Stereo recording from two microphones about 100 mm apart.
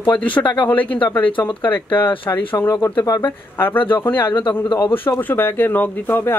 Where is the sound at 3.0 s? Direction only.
35° left (ahead or behind).